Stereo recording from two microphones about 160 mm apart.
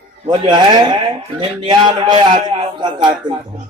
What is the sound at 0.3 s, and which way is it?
A man's voice, 30° right (ahead or behind).